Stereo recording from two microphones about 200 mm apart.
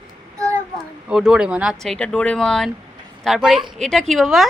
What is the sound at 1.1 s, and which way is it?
Speech, 5° right (ahead or behind).